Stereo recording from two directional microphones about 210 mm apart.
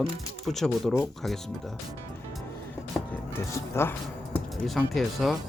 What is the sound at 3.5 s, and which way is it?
Speech, 10° left (ahead or behind).